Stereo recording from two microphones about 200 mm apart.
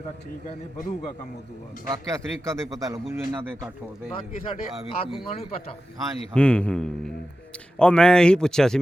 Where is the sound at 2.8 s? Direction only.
15° right (ahead or behind).